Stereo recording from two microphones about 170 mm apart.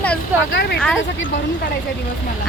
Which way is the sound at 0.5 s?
75° left (ahead or behind).